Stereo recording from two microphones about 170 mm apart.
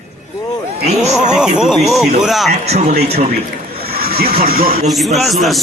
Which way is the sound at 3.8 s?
65° right (ahead or behind).